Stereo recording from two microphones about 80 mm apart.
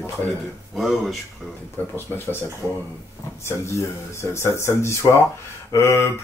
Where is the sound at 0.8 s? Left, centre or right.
Centre.